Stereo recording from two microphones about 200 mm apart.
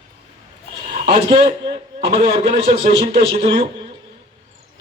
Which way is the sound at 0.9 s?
35° right (ahead or behind).